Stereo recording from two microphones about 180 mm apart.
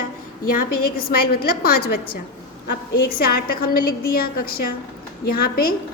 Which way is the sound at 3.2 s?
55° left (ahead or behind).